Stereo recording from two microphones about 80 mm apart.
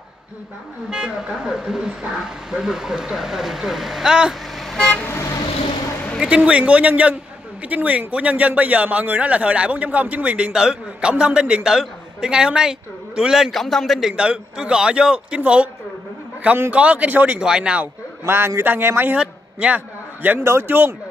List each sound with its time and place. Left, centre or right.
0.8 s a man's voice: centre
4.6 s vehicle: centre
4.8 s vehicle: centre
6.1 s a man's voice: centre
14.1 s a man's voice: centre
16.7 s a man's voice: centre
18.2 s a man's voice: right
19.1 s a sound: centre
20.4 s speech: right